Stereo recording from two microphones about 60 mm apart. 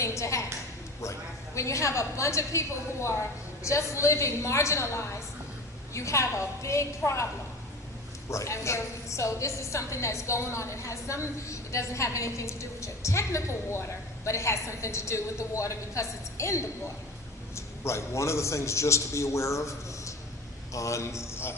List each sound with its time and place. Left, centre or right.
0.0 s a sound: left
1.5 s a woman's voice: left
8.3 s a woman's voice: left